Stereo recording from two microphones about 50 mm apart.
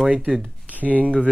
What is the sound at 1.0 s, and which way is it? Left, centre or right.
Speech, right.